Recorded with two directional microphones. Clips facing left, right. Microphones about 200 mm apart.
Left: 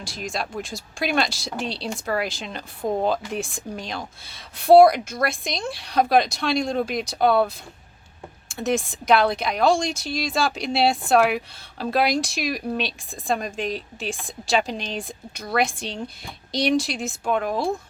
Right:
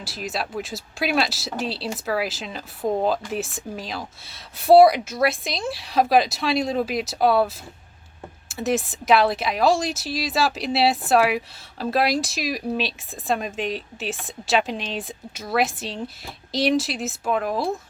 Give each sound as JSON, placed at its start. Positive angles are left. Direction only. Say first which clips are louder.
{"t": 0.0, "sound": "speech", "louder": "right 1 dB", "side_deg": -5}